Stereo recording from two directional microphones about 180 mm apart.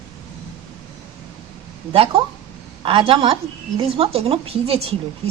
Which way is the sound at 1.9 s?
30° right (ahead or behind).